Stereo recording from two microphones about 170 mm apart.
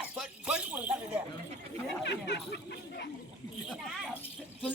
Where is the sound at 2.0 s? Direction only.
90° left.